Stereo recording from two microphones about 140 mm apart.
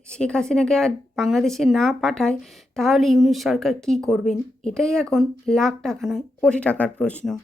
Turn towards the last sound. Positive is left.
turn(degrees=10)  # may be behind; listen again after turning